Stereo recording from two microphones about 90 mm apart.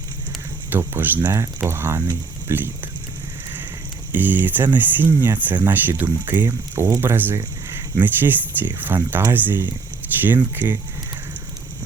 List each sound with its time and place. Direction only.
0.7 s speech: 25° right (ahead or behind)
4.1 s speech: 20° right (ahead or behind)